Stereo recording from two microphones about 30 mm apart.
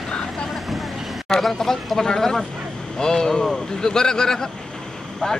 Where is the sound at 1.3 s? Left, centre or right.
Centre.